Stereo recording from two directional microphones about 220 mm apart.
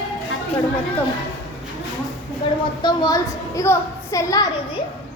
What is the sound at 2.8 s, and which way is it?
A woman's voice, 15° left (ahead or behind).